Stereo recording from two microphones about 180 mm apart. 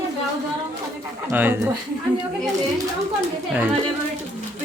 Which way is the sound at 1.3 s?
10° right (ahead or behind).